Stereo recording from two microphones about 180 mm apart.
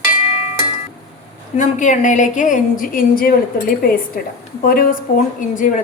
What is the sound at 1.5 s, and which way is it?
A woman's voice, 45° left (ahead or behind).